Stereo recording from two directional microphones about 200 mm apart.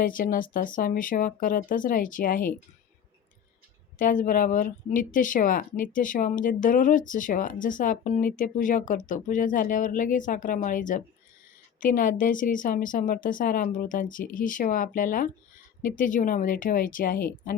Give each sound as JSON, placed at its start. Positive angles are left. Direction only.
{"t": 0.0, "sound": "a woman's voice", "side_deg": 45}
{"t": 3.9, "sound": "a woman's voice", "side_deg": 40}